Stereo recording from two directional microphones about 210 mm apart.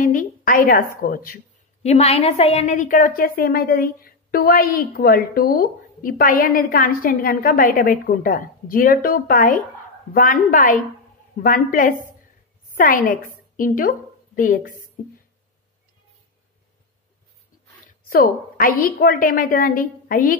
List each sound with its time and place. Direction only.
0.0 s a woman's voice: 40° left (ahead or behind)
1.8 s a woman's voice: 30° left (ahead or behind)
18.1 s a woman's voice: 45° left (ahead or behind)